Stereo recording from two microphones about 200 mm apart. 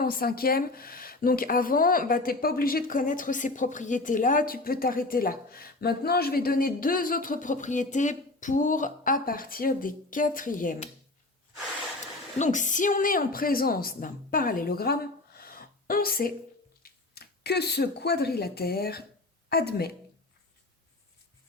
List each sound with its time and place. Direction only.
0.0 s a woman's voice: 50° left (ahead or behind)
12.4 s a woman's voice: 40° left (ahead or behind)
15.4 s a sound: 50° left (ahead or behind)
16.8 s a woman's voice: 55° left (ahead or behind)